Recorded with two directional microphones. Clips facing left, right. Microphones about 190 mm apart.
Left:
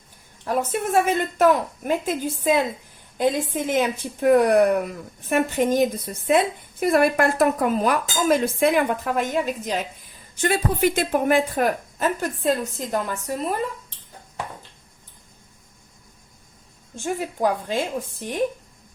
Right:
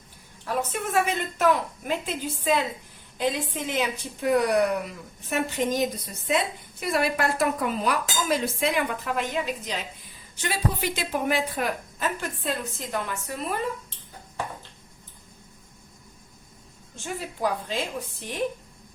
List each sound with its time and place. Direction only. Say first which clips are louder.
0.4 s speech: left 5 dB; 45° left (ahead or behind)
16.9 s speech: left 7 dB; 50° left (ahead or behind)